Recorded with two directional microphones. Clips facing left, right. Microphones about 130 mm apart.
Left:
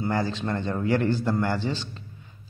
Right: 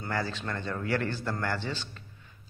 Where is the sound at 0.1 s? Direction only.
20° left (ahead or behind).